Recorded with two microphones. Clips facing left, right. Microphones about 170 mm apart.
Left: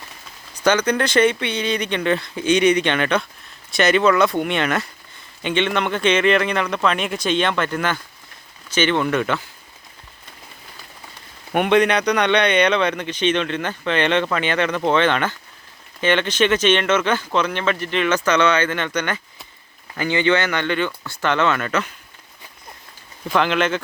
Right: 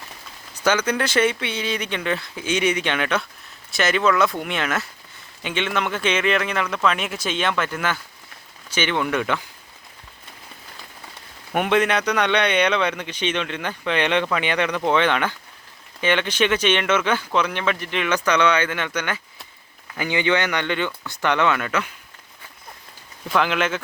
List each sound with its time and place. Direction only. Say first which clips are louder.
0.6 s speech: left 3 dB; 5° right (ahead or behind)
11.5 s speech: left 3 dB; 5° right (ahead or behind)
23.3 s speech: left 2 dB; 5° right (ahead or behind)